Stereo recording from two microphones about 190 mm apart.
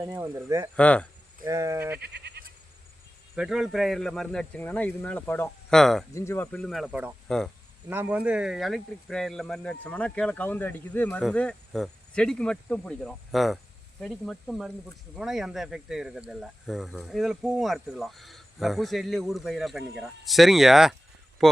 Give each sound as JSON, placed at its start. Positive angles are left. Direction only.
{"t": 0.0, "sound": "speech", "side_deg": -15}
{"t": 0.8, "sound": "speech", "side_deg": 5}
{"t": 1.5, "sound": "speech", "side_deg": -15}
{"t": 2.0, "sound": "goat", "side_deg": -60}
{"t": 3.3, "sound": "speech", "side_deg": -5}
{"t": 6.1, "sound": "speech", "side_deg": 15}
{"t": 7.9, "sound": "speech", "side_deg": -10}